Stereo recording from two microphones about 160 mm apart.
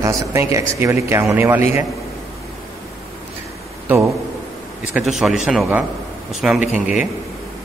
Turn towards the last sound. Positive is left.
turn(degrees=-5)  # may be behind; listen again after turning